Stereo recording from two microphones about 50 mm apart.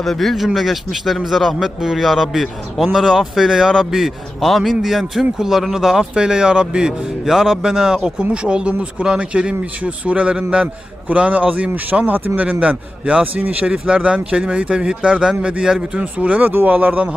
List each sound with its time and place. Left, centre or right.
0.0 s a man's voice: centre
7.3 s a man's voice: centre; by 12.3 s right
12.4 s speech: right
13.3 s speech: right
13.8 s speech: centre
16.0 s speech: right